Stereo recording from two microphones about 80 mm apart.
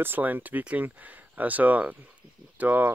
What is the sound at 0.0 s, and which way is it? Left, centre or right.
Speech, right.